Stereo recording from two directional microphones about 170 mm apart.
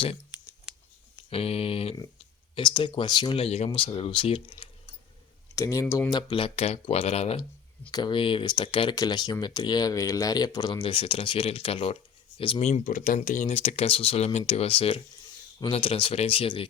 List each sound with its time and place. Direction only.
1.3 s speech: 35° left (ahead or behind)
5.5 s speech: 20° left (ahead or behind); by 7.4 s 35° left (ahead or behind)
7.9 s speech: 25° left (ahead or behind)